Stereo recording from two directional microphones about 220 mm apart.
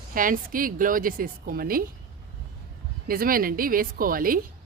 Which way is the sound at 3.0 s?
40° right (ahead or behind).